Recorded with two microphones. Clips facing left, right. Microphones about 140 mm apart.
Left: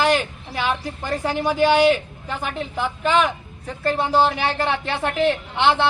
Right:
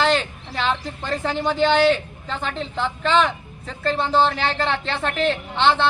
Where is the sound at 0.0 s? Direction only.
10° left (ahead or behind).